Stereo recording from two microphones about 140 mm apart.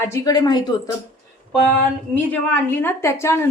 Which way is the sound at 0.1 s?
30° left (ahead or behind).